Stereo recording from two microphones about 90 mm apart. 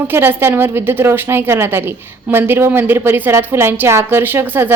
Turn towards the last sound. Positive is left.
turn(degrees=-25)  # may be behind; listen again after turning